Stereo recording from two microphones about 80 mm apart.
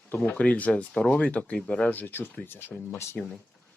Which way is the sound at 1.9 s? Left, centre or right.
Left.